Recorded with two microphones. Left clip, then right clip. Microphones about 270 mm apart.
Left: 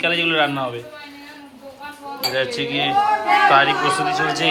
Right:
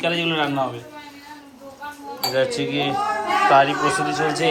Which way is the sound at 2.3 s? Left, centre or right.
Centre.